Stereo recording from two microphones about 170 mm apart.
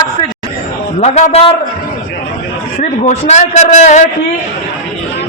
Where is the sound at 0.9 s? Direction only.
40° left (ahead or behind).